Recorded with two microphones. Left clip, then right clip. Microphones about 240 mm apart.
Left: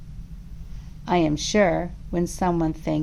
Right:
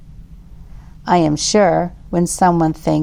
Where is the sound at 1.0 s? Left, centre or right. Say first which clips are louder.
Right 8 dB; right.